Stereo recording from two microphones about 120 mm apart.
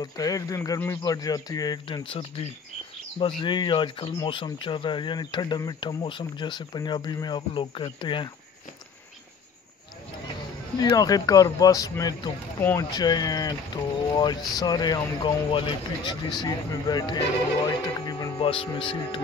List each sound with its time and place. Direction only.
0.0 s speech: 30° left (ahead or behind)
2.0 s speech: 50° left (ahead or behind)
10.8 s speech: 30° left (ahead or behind)
12.5 s speech: 20° left (ahead or behind)
12.9 s speech: 35° left (ahead or behind)
17.6 s music: 35° left (ahead or behind)
18.4 s speech: 50° left (ahead or behind)